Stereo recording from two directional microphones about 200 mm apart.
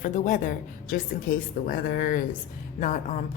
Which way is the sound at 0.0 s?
40° left (ahead or behind).